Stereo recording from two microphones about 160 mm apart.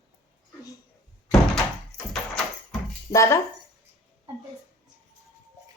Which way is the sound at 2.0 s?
5° left (ahead or behind).